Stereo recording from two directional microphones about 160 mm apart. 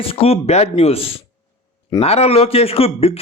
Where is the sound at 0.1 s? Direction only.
40° left (ahead or behind).